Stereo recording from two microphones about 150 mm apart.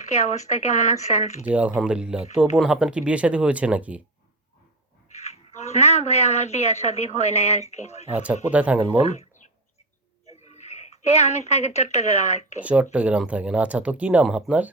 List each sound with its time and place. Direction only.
0.0 s speech: 50° left (ahead or behind)
1.5 s speech: 10° right (ahead or behind)
5.1 s speech: 45° left (ahead or behind)
8.1 s speech: 10° right (ahead or behind)
9.0 s a sound: 45° left (ahead or behind)
10.2 s speech: 45° left (ahead or behind)
12.6 s speech: 10° right (ahead or behind)